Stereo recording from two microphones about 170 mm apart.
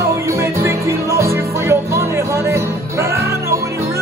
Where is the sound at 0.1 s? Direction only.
15° right (ahead or behind).